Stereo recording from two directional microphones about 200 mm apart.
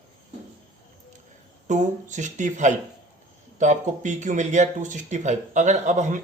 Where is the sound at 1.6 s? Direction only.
40° right (ahead or behind).